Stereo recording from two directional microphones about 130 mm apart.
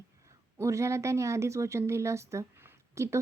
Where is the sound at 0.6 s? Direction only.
20° right (ahead or behind).